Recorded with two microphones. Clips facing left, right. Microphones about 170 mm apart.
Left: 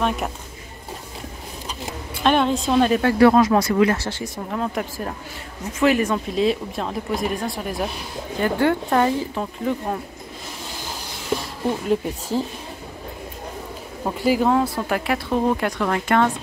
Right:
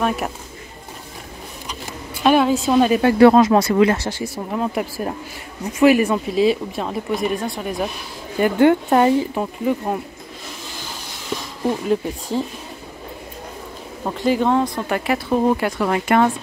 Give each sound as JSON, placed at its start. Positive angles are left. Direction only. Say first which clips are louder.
{"t": 0.0, "sound": "speech", "louder": "right 2 dB", "side_deg": -5}
{"t": 2.2, "sound": "speech", "louder": "right 3 dB", "side_deg": -5}
{"t": 3.3, "sound": "speech", "louder": "right 2 dB", "side_deg": -25}
{"t": 4.1, "sound": "speech", "louder": "right 3 dB", "side_deg": -10}
{"t": 8.4, "sound": "speech", "louder": "right 5 dB", "side_deg": -20}
{"t": 11.9, "sound": "speech", "louder": "right 1 dB", "side_deg": 0}
{"t": 14.0, "sound": "speech", "louder": "right 1 dB", "side_deg": 5}